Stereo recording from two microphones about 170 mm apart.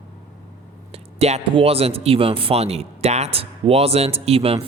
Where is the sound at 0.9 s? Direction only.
35° right (ahead or behind).